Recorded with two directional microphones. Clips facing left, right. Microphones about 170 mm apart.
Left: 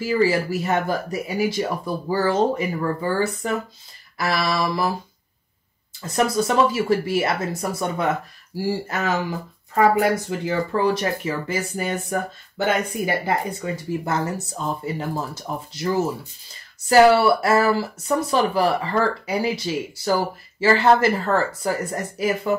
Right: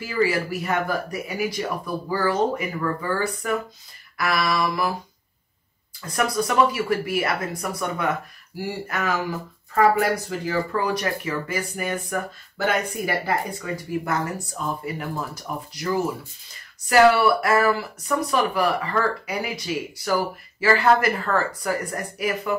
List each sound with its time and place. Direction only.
0.0 s speech: 30° left (ahead or behind)
6.0 s speech: 25° left (ahead or behind)